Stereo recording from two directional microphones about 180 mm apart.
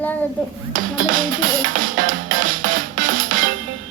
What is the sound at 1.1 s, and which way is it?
Music, 50° right (ahead or behind).